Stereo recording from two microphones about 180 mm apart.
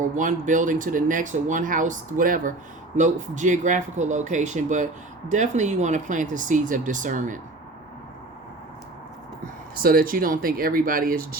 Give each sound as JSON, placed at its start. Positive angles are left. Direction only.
{"t": 0.0, "sound": "speech", "side_deg": -45}
{"t": 9.7, "sound": "speech", "side_deg": -55}